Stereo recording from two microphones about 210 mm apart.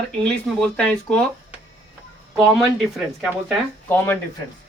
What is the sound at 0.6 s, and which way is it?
Speech, 5° left (ahead or behind).